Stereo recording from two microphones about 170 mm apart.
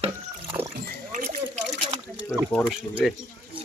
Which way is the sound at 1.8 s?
30° right (ahead or behind).